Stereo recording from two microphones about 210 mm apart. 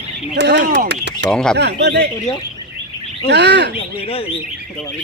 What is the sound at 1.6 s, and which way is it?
Speech, 55° right (ahead or behind).